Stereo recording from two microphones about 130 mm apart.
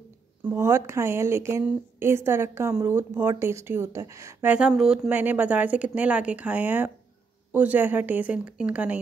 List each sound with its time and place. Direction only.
0.5 s speech: 20° right (ahead or behind)
4.5 s a woman's voice: 5° right (ahead or behind)